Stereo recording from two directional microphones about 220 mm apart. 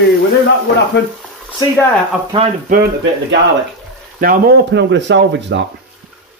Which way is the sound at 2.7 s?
45° right (ahead or behind).